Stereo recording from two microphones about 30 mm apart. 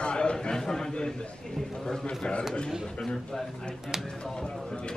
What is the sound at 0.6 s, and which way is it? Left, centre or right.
Speech, centre.